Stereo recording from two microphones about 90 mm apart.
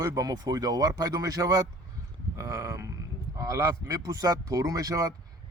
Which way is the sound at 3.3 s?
40° right (ahead or behind).